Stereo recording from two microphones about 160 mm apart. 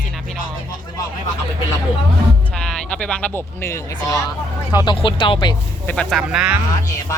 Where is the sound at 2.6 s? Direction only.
5° left (ahead or behind).